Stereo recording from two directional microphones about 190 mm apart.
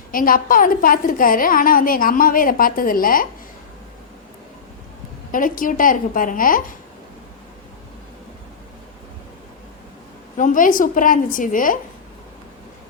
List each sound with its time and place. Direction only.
0.1 s a woman's voice: 45° left (ahead or behind)
5.3 s a woman's voice: 45° left (ahead or behind)
10.3 s a woman's voice: 45° left (ahead or behind)